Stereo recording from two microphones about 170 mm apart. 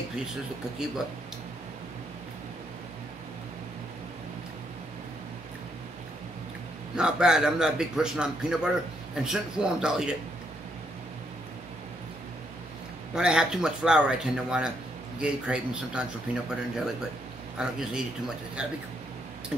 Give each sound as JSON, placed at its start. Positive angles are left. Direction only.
{"t": 7.0, "sound": "a man's voice", "side_deg": -5}
{"t": 13.1, "sound": "a man's voice", "side_deg": -5}